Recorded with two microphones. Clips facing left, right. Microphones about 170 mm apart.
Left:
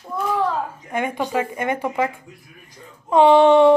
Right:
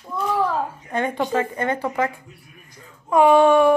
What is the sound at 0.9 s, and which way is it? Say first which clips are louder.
Speech: right 1 dB; 15° left (ahead or behind).